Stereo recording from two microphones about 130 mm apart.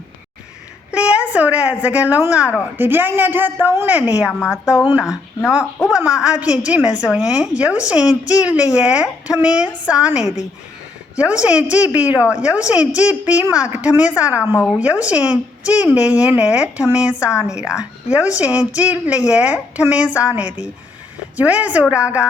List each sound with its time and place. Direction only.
0.9 s a woman's voice: 10° right (ahead or behind)
4.3 s a woman's voice: 20° left (ahead or behind)
5.9 s a woman's voice: 5° right (ahead or behind)
14.4 s a woman's voice: 30° left (ahead or behind)
14.8 s a woman's voice: 10° right (ahead or behind)